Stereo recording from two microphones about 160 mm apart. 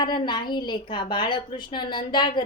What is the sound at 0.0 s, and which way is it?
A woman's voice, 25° left (ahead or behind).